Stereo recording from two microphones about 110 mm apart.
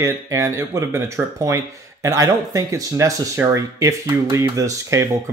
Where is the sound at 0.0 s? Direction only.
25° right (ahead or behind).